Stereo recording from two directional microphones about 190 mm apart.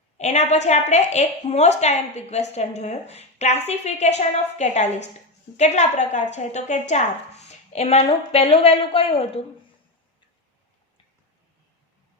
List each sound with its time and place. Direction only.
0.2 s a woman's voice: 35° left (ahead or behind)